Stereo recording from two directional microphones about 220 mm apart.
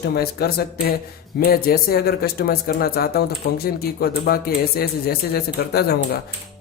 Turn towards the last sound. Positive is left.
turn(degrees=45)  # may be behind; listen again after turning